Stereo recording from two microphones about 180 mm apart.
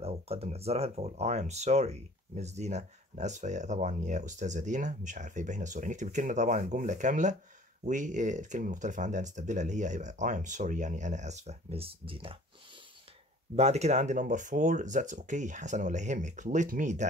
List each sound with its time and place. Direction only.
0.0 s speech: 35° right (ahead or behind)
13.6 s speech: 40° right (ahead or behind)